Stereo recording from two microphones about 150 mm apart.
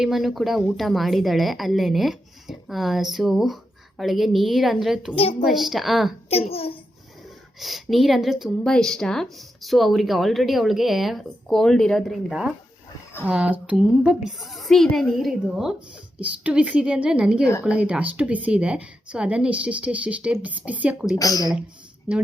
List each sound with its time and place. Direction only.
0.0 s a woman's voice: centre (ahead or behind)
6.3 s a child's voice: 40° left (ahead or behind)
7.6 s a woman's voice: centre (ahead or behind)
21.2 s speech: 25° left (ahead or behind)